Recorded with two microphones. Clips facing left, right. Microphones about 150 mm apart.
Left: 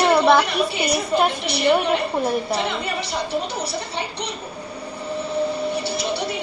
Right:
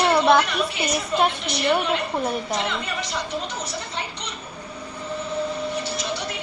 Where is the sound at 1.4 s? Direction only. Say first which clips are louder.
Left 4 dB; 35° left (ahead or behind).